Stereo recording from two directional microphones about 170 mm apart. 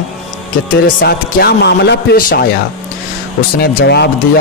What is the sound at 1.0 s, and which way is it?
Speech, 70° left (ahead or behind).